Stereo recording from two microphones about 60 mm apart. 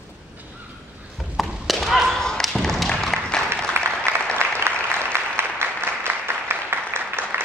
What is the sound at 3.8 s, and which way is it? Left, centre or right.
Applause, right.